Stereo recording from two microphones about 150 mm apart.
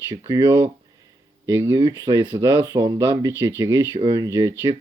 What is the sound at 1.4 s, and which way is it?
Speech, 15° right (ahead or behind).